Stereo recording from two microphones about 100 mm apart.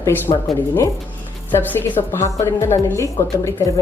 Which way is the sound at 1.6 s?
20° left (ahead or behind).